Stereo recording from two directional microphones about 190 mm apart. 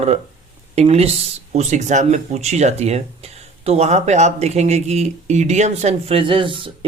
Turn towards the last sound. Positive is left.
turn(degrees=-25)  # may be behind; listen again after turning